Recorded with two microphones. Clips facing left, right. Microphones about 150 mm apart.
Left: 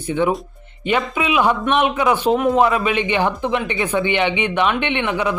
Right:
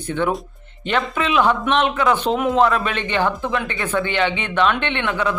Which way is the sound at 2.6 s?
10° left (ahead or behind).